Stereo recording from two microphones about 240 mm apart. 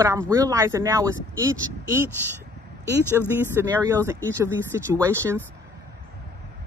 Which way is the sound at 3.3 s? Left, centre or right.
Centre.